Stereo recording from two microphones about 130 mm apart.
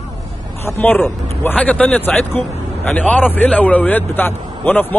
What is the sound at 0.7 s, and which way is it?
A man's voice, 15° left (ahead or behind).